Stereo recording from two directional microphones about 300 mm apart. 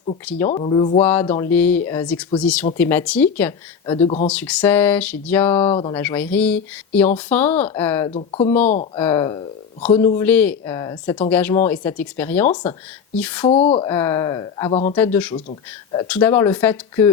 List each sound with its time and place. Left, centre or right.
0.3 s speech: centre
0.6 s speech: centre
1.0 s speech: centre
3.8 s speech: centre
4.3 s speech: centre
5.6 s speech: centre
5.9 s speech: centre
8.1 s speech: left
9.0 s speech: centre
13.4 s speech: centre
13.9 s speech: centre
14.9 s speech: centre